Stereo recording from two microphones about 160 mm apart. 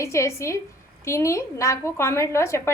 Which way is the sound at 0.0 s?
20° left (ahead or behind).